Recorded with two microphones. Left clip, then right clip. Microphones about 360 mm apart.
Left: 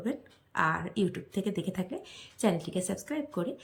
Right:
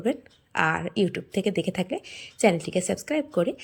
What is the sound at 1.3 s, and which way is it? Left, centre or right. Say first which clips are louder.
Speech: right 8 dB; centre.